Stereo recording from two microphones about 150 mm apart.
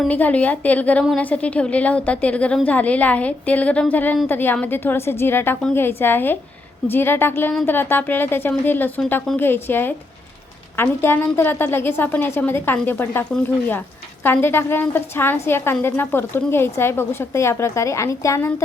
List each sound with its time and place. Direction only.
0.1 s a woman's voice: 10° left (ahead or behind)
14.3 s a woman's voice: 15° left (ahead or behind)